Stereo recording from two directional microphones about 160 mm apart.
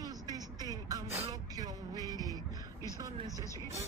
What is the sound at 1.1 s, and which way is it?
Speech, 40° right (ahead or behind).